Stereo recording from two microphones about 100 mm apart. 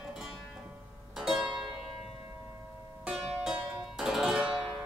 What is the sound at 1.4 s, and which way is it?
Zither, 55° right (ahead or behind).